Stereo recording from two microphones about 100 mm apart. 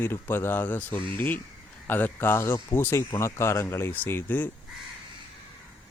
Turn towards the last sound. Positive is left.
turn(degrees=20)  # may be behind; listen again after turning